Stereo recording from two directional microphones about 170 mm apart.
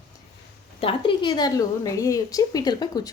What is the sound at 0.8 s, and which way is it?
A woman's voice, 30° left (ahead or behind).